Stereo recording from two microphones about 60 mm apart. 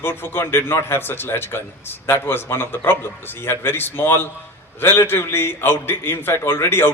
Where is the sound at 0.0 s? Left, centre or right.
Left.